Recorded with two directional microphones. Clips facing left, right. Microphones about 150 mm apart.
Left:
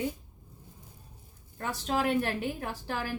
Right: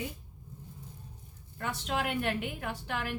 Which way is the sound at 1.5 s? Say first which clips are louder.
Left 3 dB; 40° left (ahead or behind).